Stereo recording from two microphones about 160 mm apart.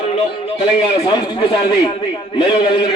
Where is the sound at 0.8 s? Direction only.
30° left (ahead or behind).